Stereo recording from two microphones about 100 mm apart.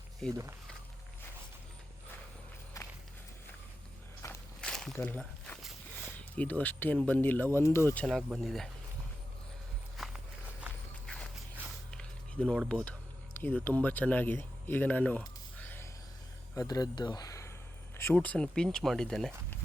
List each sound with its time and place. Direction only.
0.2 s speech: 5° left (ahead or behind)
4.2 s walk: 30° left (ahead or behind)
4.6 s a sound: 5° left (ahead or behind)
4.9 s speech: 15° left (ahead or behind)
7.9 s speech: 5° left (ahead or behind)
10.0 s walk: centre (ahead or behind)
11.9 s a sound: 10° left (ahead or behind)
12.8 s speech: 15° left (ahead or behind)
15.5 s a sound: 20° left (ahead or behind)
16.6 s speech: 40° left (ahead or behind)
17.9 s speech: 20° left (ahead or behind); by 19.3 s 5° left (ahead or behind)